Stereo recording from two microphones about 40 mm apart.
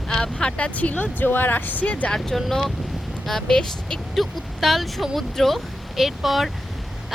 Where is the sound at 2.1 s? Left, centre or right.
Centre.